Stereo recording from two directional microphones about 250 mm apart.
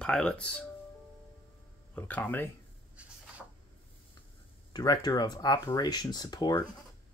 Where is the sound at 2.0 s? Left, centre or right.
Centre.